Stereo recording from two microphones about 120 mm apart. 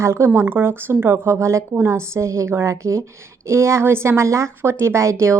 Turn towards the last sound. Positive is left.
turn(degrees=-25)  # may be behind; listen again after turning